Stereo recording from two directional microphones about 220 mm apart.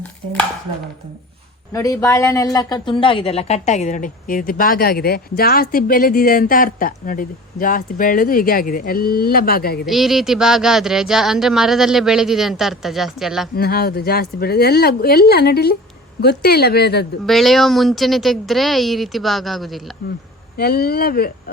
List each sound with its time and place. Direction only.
1.7 s speech: 15° left (ahead or behind); by 9.8 s 45° left (ahead or behind)
9.8 s speech: centre (ahead or behind)
13.6 s speech: 45° left (ahead or behind)
17.2 s speech: centre (ahead or behind)
20.6 s speech: 45° left (ahead or behind)